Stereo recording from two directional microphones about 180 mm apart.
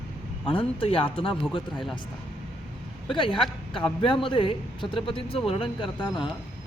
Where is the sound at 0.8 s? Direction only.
30° left (ahead or behind).